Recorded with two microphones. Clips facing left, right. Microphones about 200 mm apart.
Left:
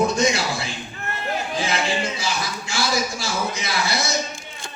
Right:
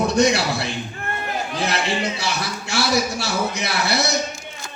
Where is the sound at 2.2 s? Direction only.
65° right (ahead or behind).